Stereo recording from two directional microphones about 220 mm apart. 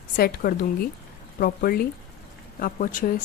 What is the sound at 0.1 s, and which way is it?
Speech, 40° left (ahead or behind).